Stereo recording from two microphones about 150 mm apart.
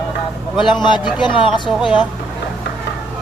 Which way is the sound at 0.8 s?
30° left (ahead or behind).